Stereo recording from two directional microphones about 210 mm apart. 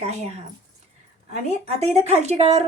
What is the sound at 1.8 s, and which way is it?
Speech, 30° right (ahead or behind).